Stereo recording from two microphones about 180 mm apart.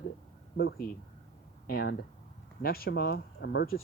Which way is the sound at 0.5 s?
60° left (ahead or behind).